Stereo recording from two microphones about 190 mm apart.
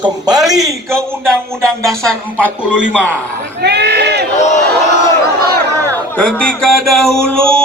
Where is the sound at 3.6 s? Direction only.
60° right (ahead or behind).